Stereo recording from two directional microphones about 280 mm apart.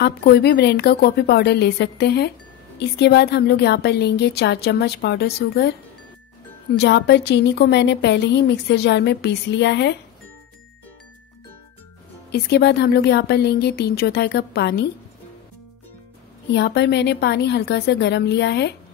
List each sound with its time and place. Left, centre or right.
0.0 s a woman's voice: left
6.8 s a woman's voice: left
12.3 s a woman's voice: left
16.5 s a woman's voice: left